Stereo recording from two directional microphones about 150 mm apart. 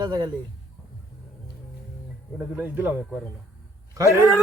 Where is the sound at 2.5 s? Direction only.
10° right (ahead or behind).